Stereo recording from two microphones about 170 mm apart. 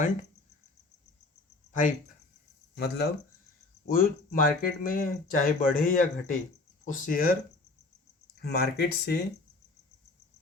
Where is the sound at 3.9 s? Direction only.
55° left (ahead or behind).